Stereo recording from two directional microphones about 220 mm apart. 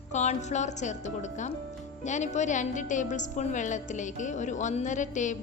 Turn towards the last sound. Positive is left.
turn(degrees=35)  # may be behind; listen again after turning